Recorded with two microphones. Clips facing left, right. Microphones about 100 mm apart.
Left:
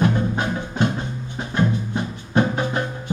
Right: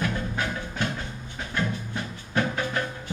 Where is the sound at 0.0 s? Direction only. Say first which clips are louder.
Left 8 dB; 25° left (ahead or behind).